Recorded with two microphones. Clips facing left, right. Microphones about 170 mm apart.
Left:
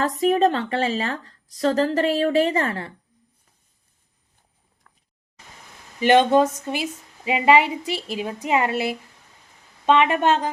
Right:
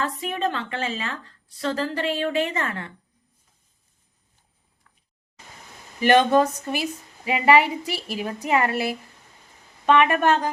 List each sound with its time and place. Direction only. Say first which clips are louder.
0.0 s a woman's voice: left 8 dB; 40° left (ahead or behind)
4.9 s a sound: left 4 dB; 55° left (ahead or behind)
6.0 s a woman's voice: left 1 dB; 20° left (ahead or behind)